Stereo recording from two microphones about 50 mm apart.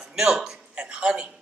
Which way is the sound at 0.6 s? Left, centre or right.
Centre.